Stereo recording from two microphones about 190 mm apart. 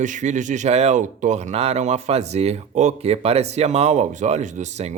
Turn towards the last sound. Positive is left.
turn(degrees=-35)  # may be behind; listen again after turning